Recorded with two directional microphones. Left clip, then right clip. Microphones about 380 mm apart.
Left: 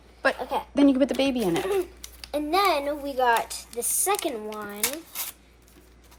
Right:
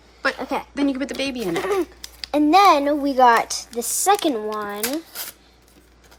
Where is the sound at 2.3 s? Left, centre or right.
Right.